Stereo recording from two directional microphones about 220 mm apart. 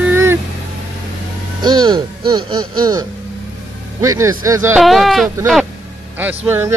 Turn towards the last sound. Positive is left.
turn(degrees=-10)  # may be behind; listen again after turning